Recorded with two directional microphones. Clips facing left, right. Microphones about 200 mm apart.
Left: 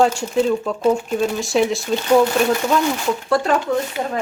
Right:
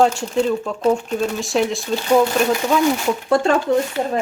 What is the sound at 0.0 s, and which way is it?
Speech, centre (ahead or behind).